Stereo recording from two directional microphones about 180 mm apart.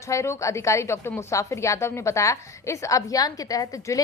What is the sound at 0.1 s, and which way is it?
A woman's voice, 15° left (ahead or behind).